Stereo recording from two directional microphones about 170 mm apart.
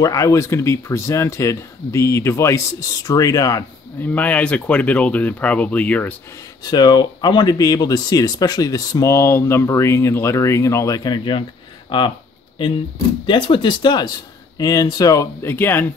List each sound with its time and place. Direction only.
0.0 s speech: 20° left (ahead or behind)
4.0 s speech: 10° left (ahead or behind)
6.6 s speech: 25° left (ahead or behind)
13.3 s speech: 30° left (ahead or behind); by 15.9 s 10° left (ahead or behind)